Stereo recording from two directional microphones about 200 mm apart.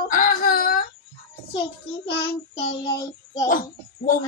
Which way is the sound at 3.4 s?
40° left (ahead or behind).